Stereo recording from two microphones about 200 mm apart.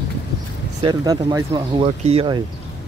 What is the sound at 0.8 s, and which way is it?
Speech, 20° right (ahead or behind).